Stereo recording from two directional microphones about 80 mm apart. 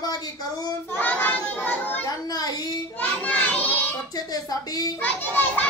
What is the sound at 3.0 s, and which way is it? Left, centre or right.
Children playing, left.